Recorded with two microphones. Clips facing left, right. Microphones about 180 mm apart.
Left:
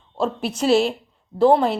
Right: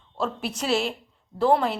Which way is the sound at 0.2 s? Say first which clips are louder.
Left 6 dB; 30° left (ahead or behind).